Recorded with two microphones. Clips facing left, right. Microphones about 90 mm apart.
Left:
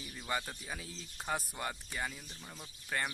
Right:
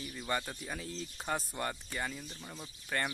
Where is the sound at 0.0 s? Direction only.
5° left (ahead or behind).